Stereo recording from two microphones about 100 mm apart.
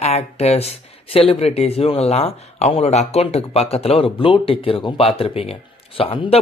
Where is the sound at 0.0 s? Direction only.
90° left.